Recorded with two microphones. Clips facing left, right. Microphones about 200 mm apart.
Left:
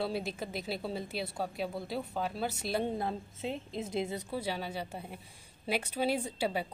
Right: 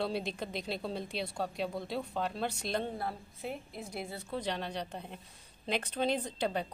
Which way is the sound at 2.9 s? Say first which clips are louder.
Left 4 dB; 20° left (ahead or behind).